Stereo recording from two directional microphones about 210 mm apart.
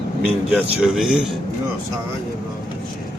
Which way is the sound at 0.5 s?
Centre (ahead or behind).